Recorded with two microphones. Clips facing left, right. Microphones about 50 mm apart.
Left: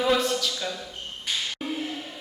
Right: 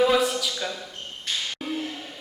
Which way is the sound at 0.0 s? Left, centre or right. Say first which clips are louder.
Right 2 dB; centre.